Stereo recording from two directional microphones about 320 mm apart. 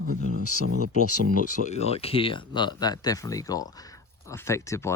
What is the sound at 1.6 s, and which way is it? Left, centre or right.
Speech, centre.